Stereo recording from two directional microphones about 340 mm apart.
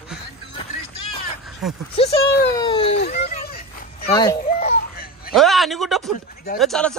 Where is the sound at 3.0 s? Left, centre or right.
Left.